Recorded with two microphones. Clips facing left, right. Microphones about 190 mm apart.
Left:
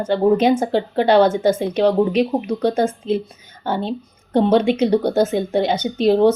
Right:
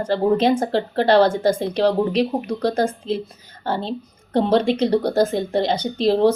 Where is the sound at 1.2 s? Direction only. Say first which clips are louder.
Left 2 dB; 30° right (ahead or behind).